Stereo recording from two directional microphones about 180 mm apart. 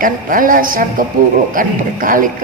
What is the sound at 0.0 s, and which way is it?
A man's voice, 50° right (ahead or behind).